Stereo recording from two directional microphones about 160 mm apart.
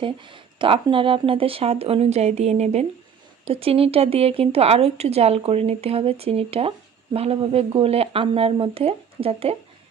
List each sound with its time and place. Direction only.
0.0 s speech: 30° right (ahead or behind)